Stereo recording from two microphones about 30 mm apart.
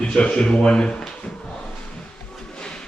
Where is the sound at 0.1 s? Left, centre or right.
Left.